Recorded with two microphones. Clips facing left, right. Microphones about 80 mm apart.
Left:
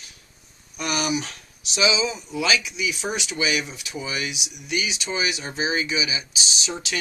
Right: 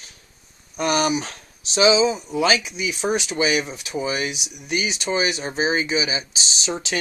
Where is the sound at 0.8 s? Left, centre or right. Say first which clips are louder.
Right 5 dB; right.